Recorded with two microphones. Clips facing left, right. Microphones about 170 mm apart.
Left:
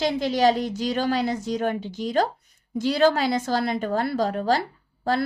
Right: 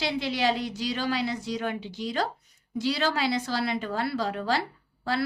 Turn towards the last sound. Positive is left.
turn(degrees=45)  # may be behind; listen again after turning